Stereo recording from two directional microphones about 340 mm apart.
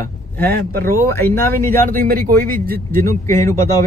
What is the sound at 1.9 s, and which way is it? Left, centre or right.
Speech, right.